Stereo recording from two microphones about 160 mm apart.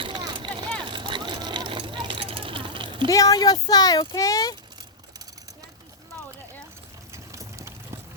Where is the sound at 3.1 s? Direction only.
20° left (ahead or behind).